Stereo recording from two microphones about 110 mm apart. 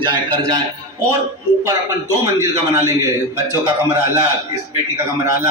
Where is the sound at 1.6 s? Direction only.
30° right (ahead or behind).